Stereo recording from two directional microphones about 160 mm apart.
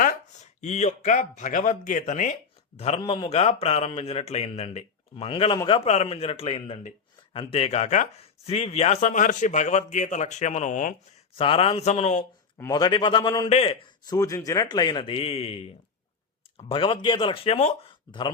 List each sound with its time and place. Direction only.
0.0 s speech: 50° left (ahead or behind)
11.3 s speech: 35° left (ahead or behind)
12.5 s speech: 20° left (ahead or behind)
13.5 s speech: 40° left (ahead or behind)
14.1 s speech: 20° left (ahead or behind); by 17.9 s 45° left (ahead or behind)